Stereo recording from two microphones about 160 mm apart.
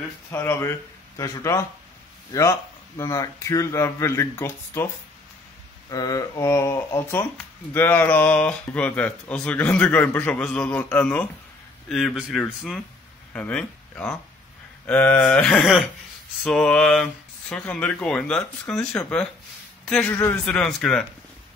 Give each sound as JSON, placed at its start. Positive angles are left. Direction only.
{"t": 0.3, "sound": "speech", "side_deg": 15}
{"t": 3.0, "sound": "speech", "side_deg": 20}
{"t": 5.9, "sound": "speech", "side_deg": 25}